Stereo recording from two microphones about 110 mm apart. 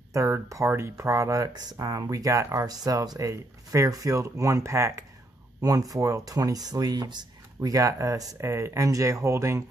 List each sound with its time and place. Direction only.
0.1 s speech: 30° right (ahead or behind)